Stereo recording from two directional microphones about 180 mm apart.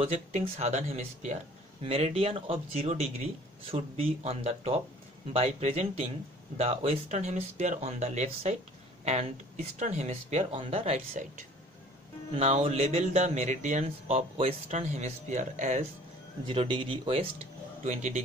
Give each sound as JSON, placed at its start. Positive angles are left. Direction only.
{"t": 0.0, "sound": "speech", "side_deg": -35}
{"t": 9.8, "sound": "speech", "side_deg": -40}
{"t": 12.4, "sound": "speech", "side_deg": -35}
{"t": 16.4, "sound": "speech", "side_deg": -25}